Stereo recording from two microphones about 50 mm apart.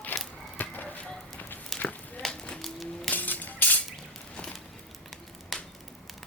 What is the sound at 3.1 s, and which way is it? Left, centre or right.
Music, left.